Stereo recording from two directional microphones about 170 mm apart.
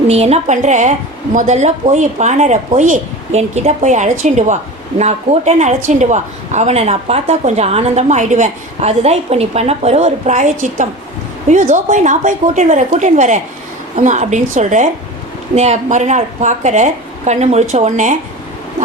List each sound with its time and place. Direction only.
0.1 s a woman's voice: 40° right (ahead or behind)